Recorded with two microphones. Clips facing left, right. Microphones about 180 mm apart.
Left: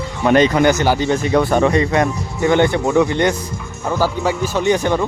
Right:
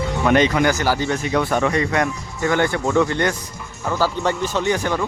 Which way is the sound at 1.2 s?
35° left (ahead or behind).